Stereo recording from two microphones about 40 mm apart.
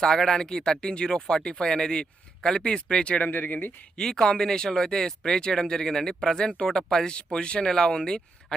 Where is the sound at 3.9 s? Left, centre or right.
Centre.